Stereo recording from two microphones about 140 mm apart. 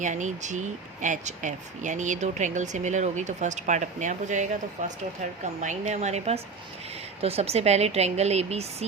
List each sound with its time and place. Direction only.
0.0 s speech: 60° right (ahead or behind)